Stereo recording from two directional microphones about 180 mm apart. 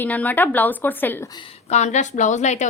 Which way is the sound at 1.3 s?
30° left (ahead or behind).